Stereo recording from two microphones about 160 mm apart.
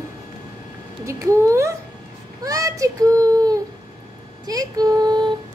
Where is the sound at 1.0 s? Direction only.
20° right (ahead or behind).